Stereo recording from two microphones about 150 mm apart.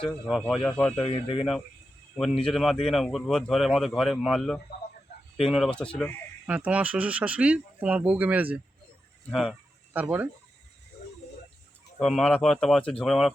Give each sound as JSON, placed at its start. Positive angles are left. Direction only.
{"t": 0.0, "sound": "a man's voice", "side_deg": 5}
{"t": 0.9, "sound": "speech", "side_deg": 40}
{"t": 2.4, "sound": "a man's voice", "side_deg": 0}
{"t": 6.5, "sound": "speech", "side_deg": -10}
{"t": 9.3, "sound": "a man's voice", "side_deg": 0}
{"t": 9.9, "sound": "speech", "side_deg": -10}
{"t": 11.9, "sound": "a man's voice", "side_deg": 0}